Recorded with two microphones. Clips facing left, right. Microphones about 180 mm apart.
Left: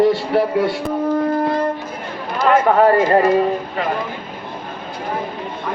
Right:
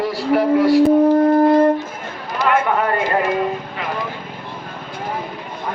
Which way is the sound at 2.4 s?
35° left (ahead or behind).